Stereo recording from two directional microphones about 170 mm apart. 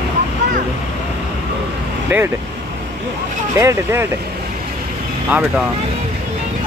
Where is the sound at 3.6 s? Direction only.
15° right (ahead or behind).